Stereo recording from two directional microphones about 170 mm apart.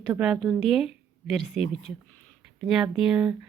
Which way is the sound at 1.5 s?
40° left (ahead or behind).